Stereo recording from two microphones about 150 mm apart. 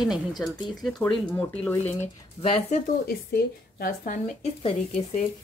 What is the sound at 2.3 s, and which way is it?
Speech, 40° left (ahead or behind).